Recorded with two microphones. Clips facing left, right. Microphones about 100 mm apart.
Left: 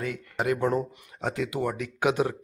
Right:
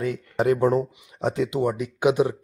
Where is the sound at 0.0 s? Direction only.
30° right (ahead or behind).